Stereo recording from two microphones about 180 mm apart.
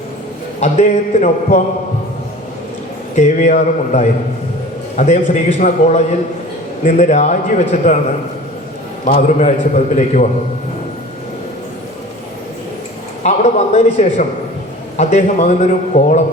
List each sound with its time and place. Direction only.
0.6 s a man's voice: 40° left (ahead or behind)
3.2 s a man's voice: 40° left (ahead or behind)
9.0 s a man's voice: 40° left (ahead or behind)
13.2 s a man's voice: 40° left (ahead or behind)